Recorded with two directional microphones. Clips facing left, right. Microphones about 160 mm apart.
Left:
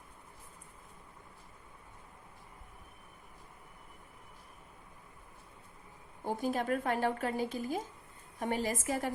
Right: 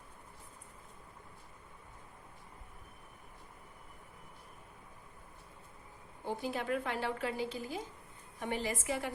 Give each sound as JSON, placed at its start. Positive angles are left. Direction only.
{"t": 6.2, "sound": "speech", "side_deg": 45}